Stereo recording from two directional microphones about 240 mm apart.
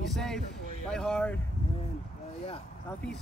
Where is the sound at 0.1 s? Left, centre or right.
Centre.